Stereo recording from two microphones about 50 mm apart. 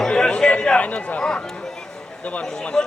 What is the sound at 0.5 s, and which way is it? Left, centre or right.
A man's voice, left.